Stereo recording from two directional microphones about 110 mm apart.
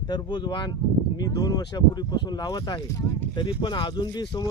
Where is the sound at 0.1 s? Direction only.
40° left (ahead or behind).